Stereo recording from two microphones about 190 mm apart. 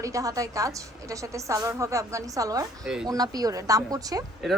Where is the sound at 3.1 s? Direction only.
20° right (ahead or behind).